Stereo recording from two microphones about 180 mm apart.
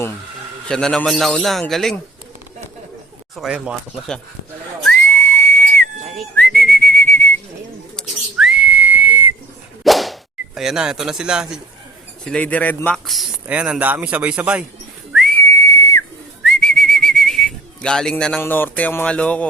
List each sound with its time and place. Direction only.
0.7 s a man's voice: 5° left (ahead or behind)
3.3 s a man's voice: 5° right (ahead or behind)
5.1 s whistle: 10° left (ahead or behind)
6.1 s whistling: 5° left (ahead or behind)
7.9 s whistle: centre (ahead or behind)
9.8 s whip: centre (ahead or behind)
12.2 s speech: 5° left (ahead or behind)
15.4 s whistle: 15° left (ahead or behind)
16.4 s whistling: 5° left (ahead or behind)